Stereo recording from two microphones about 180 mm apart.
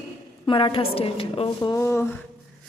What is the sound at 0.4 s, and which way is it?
A woman's voice, 30° left (ahead or behind).